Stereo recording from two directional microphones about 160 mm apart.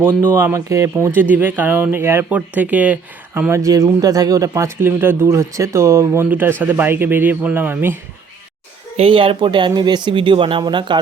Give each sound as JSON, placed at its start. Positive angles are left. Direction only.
{"t": 0.3, "sound": "speech", "side_deg": -15}
{"t": 9.0, "sound": "speech", "side_deg": -35}